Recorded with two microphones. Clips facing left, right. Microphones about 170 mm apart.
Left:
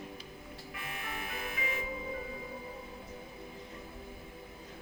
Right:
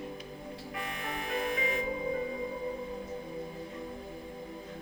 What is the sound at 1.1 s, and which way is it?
Music, 40° right (ahead or behind).